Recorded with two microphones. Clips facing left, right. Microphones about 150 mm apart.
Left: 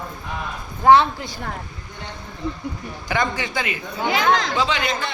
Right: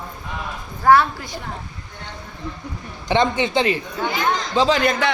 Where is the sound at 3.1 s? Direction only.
25° right (ahead or behind).